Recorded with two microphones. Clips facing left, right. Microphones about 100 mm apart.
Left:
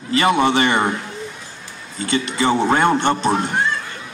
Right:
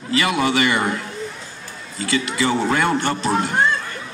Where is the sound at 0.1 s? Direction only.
30° left (ahead or behind).